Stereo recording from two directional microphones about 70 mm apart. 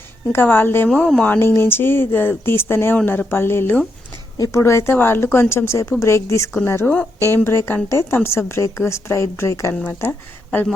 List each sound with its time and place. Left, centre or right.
0.3 s speech: left
4.4 s speech: left
6.8 s a woman's voice: centre
7.3 s speech: left
9.8 s speech: left